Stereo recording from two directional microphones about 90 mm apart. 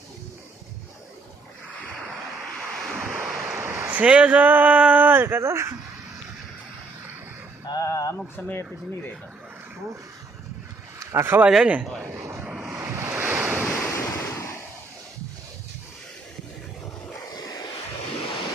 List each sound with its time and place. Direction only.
2.6 s waves: 5° left (ahead or behind)
3.8 s speech: 15° right (ahead or behind); by 5.7 s 30° right (ahead or behind)
7.7 s a sound: 40° left (ahead or behind)
8.4 s speech: 20° left (ahead or behind)
11.0 s speech: 25° right (ahead or behind)
11.4 s speech: 10° right (ahead or behind)
12.5 s waves: 10° right (ahead or behind)
12.8 s waves: 30° right (ahead or behind)
13.1 s waves: 20° right (ahead or behind)
13.8 s waves: 30° left (ahead or behind)
17.3 s vehicle: 45° left (ahead or behind)